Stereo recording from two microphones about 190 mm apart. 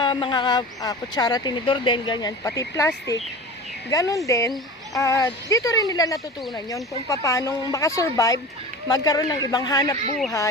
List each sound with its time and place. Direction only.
0.0 s a woman's voice: 25° left (ahead or behind)